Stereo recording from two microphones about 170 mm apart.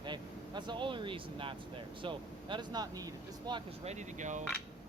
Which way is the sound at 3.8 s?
45° right (ahead or behind).